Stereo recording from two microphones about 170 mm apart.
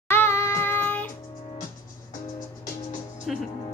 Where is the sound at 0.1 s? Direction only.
15° left (ahead or behind).